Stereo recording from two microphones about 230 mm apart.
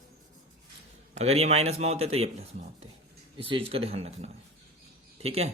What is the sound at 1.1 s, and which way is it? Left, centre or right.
Speech, right.